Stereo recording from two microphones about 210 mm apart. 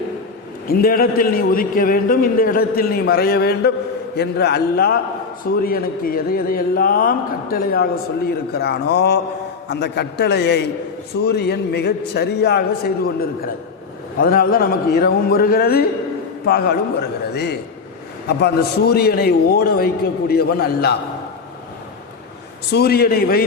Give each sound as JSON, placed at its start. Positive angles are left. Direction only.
{"t": 0.7, "sound": "a man's voice", "side_deg": 45}
{"t": 14.2, "sound": "a man's voice", "side_deg": 45}
{"t": 22.7, "sound": "a man's voice", "side_deg": 50}